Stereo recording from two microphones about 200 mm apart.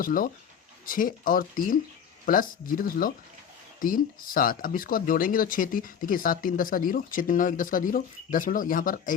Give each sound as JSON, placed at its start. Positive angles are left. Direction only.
{"t": 0.0, "sound": "speech", "side_deg": 45}